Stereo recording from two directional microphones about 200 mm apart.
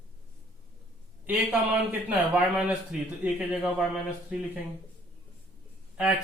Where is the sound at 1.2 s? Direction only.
10° right (ahead or behind).